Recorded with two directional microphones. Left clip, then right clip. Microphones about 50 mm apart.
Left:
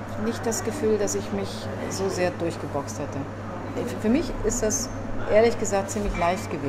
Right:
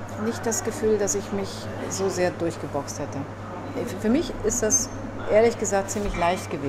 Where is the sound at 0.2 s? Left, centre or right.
Centre.